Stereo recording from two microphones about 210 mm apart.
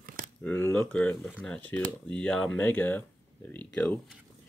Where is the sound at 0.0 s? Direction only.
40° right (ahead or behind).